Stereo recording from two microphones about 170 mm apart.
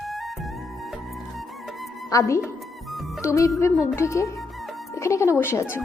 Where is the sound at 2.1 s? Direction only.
20° left (ahead or behind).